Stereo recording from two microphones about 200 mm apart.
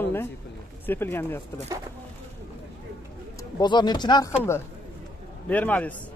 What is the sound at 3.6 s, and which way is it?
Speech, 20° left (ahead or behind).